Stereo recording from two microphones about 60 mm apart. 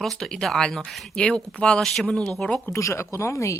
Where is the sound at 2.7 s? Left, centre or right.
Left.